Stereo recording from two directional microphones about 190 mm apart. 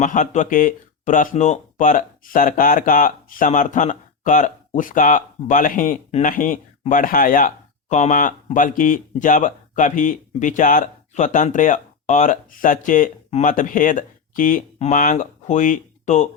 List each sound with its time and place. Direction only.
0.0 s speech: 40° left (ahead or behind)